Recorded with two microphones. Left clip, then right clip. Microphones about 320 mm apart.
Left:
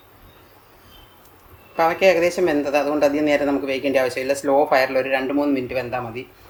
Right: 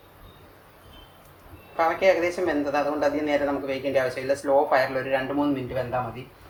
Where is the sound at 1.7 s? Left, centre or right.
Left.